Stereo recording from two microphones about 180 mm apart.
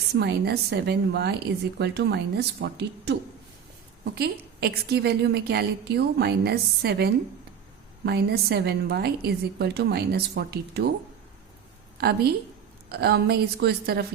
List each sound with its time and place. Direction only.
0.2 s a woman's voice: 70° right (ahead or behind)
11.9 s a woman's voice: 65° right (ahead or behind)